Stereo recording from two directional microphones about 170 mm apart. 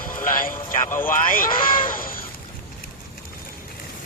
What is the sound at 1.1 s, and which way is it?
Speech, 55° left (ahead or behind).